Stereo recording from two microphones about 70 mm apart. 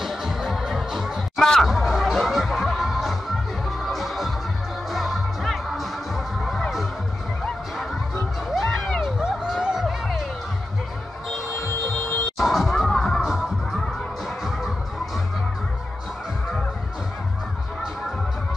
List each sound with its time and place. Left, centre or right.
0.0 s music: centre
1.4 s music: centre
1.7 s music: centre
8.5 s music: centre
9.2 s music: centre
11.6 s a sound: left
12.4 s a sound: centre
13.2 s music: centre